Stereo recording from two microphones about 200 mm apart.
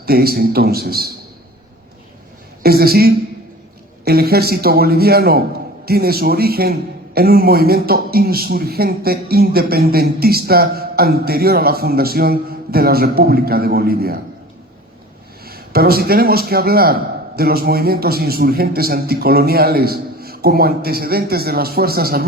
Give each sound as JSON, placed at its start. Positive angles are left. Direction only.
{"t": 0.0, "sound": "a man's voice", "side_deg": -50}
{"t": 2.6, "sound": "a man's voice", "side_deg": -50}
{"t": 15.4, "sound": "a man's voice", "side_deg": -50}